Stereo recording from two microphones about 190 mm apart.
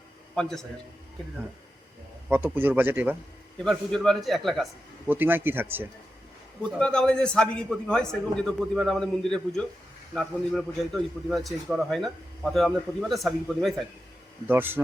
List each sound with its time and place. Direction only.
0.3 s a man's voice: 5° left (ahead or behind)
2.3 s speech: 10° right (ahead or behind)
3.6 s a man's voice: centre (ahead or behind)
5.0 s speech: 10° right (ahead or behind)
6.7 s a man's voice: 5° left (ahead or behind)
14.4 s speech: 10° right (ahead or behind)